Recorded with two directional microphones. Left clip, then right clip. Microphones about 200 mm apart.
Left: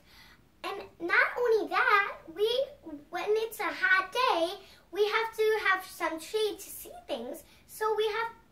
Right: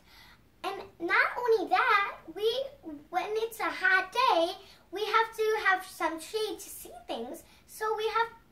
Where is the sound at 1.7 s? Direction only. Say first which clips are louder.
Even; 5° left (ahead or behind).